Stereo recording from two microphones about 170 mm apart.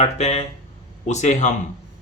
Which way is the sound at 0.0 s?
35° left (ahead or behind).